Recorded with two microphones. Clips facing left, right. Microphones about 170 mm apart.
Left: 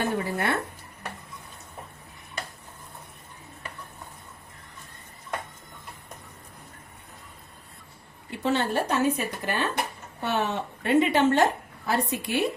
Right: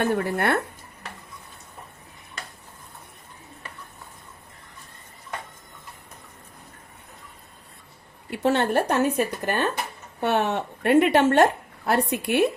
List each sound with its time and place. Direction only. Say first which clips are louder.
0.0 s speech: right 4 dB; 60° right (ahead or behind)
8.3 s speech: right 4 dB; 60° right (ahead or behind)